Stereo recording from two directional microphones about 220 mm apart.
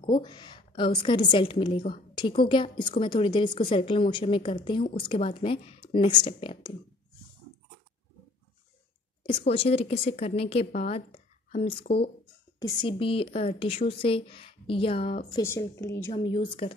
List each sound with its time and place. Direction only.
0.1 s a woman's voice: 20° left (ahead or behind)
9.2 s a woman's voice: 25° left (ahead or behind)
12.5 s a woman's voice: 20° left (ahead or behind)
15.3 s a woman's voice: 10° left (ahead or behind)
16.1 s a woman's voice: 20° left (ahead or behind)